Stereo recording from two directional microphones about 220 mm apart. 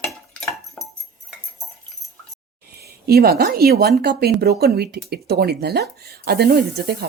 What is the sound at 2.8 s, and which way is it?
Speech, 45° right (ahead or behind).